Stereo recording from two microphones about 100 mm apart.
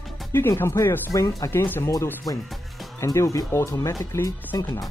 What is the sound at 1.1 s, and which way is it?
Speech, 35° left (ahead or behind).